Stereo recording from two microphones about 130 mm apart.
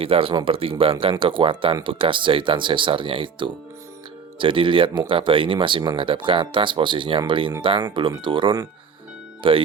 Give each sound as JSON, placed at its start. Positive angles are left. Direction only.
{"t": 0.0, "sound": "speech", "side_deg": -45}